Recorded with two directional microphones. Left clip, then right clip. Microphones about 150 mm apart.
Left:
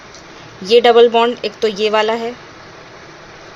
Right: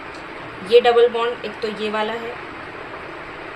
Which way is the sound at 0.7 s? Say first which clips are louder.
Left 5 dB; 55° left (ahead or behind).